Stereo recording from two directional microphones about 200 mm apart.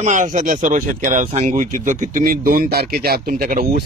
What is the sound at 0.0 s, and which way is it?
Speech, 40° right (ahead or behind).